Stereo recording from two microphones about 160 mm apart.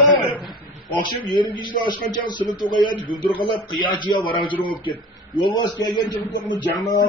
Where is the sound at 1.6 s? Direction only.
30° left (ahead or behind).